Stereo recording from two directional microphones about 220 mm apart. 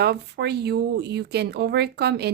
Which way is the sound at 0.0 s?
45° right (ahead or behind).